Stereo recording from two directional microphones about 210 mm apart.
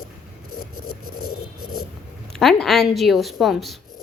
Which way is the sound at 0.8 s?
45° left (ahead or behind).